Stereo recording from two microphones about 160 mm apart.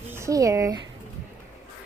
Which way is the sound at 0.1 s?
20° right (ahead or behind).